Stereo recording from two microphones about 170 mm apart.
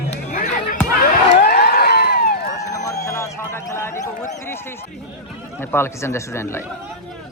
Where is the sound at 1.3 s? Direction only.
70° left (ahead or behind).